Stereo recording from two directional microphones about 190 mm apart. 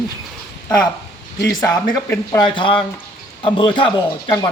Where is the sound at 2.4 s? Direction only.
25° left (ahead or behind).